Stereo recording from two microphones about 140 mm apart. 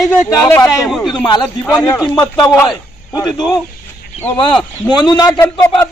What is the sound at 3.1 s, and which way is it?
A man's voice, 25° left (ahead or behind).